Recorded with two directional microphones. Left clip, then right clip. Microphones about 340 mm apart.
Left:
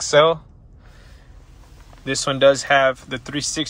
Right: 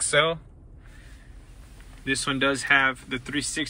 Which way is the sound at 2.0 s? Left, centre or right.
Centre.